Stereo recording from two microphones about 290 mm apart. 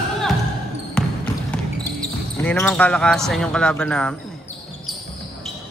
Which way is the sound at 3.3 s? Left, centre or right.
Centre.